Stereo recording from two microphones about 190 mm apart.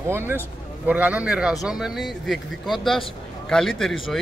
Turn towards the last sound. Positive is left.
turn(degrees=0)  # may be behind; listen again after turning